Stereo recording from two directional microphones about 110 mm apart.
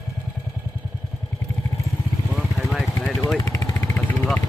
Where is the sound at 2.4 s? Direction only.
Centre (ahead or behind).